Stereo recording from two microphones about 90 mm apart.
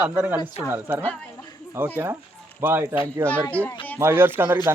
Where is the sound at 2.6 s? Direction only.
25° right (ahead or behind).